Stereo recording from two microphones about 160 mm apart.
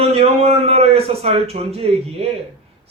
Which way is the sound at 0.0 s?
40° right (ahead or behind).